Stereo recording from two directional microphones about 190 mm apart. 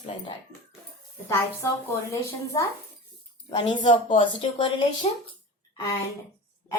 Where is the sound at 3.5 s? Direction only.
25° left (ahead or behind).